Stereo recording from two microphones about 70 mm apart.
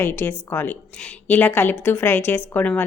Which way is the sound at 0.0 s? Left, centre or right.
Left.